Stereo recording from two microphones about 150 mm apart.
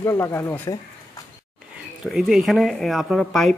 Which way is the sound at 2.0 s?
5° right (ahead or behind).